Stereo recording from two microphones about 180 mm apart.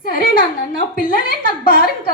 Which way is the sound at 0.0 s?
55° left (ahead or behind).